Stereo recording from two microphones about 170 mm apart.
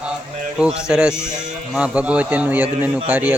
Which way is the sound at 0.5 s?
5° right (ahead or behind).